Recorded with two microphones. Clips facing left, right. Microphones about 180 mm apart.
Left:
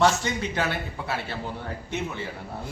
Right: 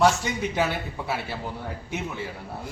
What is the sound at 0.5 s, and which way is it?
Speech, 10° right (ahead or behind).